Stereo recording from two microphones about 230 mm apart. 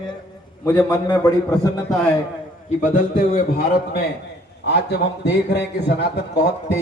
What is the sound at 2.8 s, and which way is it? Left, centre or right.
Speech, left.